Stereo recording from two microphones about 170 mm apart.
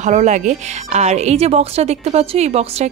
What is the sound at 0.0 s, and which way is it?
A woman's voice, 45° right (ahead or behind).